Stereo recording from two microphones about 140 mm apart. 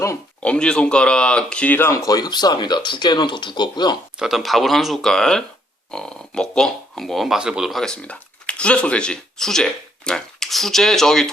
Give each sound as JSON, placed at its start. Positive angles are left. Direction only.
{"t": 0.4, "sound": "speech", "side_deg": 5}
{"t": 2.0, "sound": "speech", "side_deg": 25}
{"t": 4.2, "sound": "speech", "side_deg": 0}